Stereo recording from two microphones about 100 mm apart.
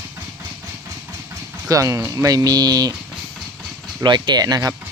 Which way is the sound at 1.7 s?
35° right (ahead or behind).